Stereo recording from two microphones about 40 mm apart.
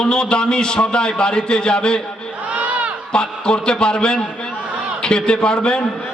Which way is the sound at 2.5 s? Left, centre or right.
Right.